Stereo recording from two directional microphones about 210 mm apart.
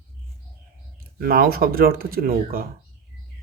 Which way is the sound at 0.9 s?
45° right (ahead or behind).